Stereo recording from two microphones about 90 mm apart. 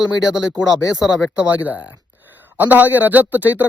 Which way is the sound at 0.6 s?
50° right (ahead or behind).